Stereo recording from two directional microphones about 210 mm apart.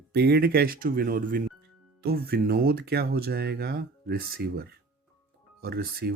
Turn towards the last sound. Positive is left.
turn(degrees=-50)  # may be behind; listen again after turning